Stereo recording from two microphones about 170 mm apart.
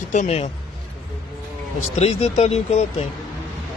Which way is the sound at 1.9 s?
40° left (ahead or behind).